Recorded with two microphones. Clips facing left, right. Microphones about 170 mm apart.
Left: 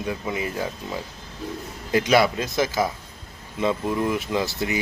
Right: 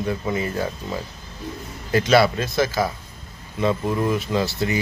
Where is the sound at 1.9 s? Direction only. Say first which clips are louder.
Right 2 dB; 15° left (ahead or behind).